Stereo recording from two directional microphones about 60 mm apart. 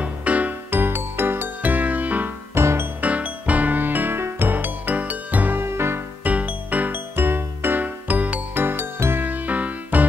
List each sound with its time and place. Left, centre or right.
0.0 s music: right
0.7 s music: right
2.5 s music: right
3.0 s music: right
5.6 s music: right
6.2 s music: right
8.6 s music: right